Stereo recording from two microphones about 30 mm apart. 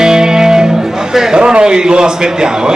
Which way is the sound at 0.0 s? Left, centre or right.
Right.